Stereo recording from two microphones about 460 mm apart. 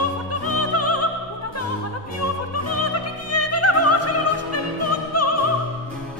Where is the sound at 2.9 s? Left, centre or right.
Left.